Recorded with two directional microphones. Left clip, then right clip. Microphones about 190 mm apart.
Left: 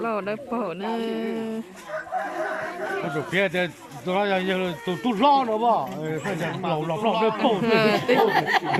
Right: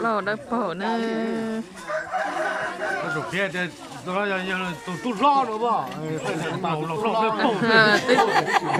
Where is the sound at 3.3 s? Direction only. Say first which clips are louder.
Left 3 dB; 35° left (ahead or behind).